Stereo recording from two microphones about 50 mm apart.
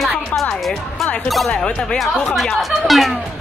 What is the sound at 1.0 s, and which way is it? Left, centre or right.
Speech, centre.